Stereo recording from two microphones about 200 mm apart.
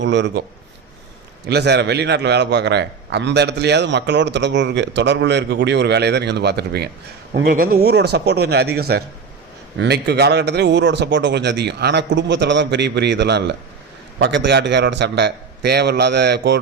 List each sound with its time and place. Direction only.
0.0 s a man's voice: 60° right (ahead or behind)
1.5 s a man's voice: 55° right (ahead or behind)